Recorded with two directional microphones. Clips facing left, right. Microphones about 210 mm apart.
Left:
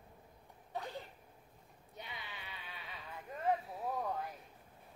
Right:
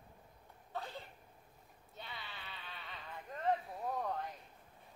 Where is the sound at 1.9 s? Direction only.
15° left (ahead or behind).